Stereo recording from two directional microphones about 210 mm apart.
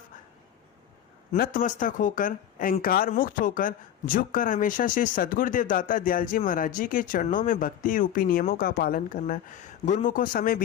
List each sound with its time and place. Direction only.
1.3 s speech: 40° left (ahead or behind)